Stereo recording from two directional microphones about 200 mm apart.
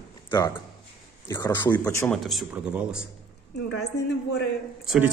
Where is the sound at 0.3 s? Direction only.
10° left (ahead or behind).